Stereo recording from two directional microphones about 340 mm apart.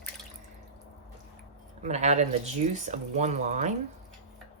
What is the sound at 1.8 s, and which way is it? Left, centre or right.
A woman's voice, centre.